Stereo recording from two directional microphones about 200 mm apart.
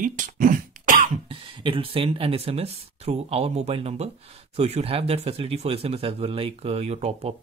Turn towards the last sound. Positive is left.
turn(degrees=-30)  # may be behind; listen again after turning